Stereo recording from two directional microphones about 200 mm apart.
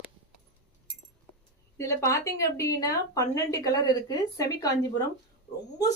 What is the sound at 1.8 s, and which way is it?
A woman's voice, 15° left (ahead or behind).